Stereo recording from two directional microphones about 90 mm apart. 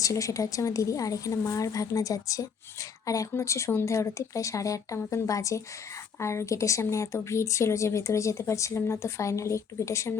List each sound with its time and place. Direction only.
0.0 s speech: 35° left (ahead or behind)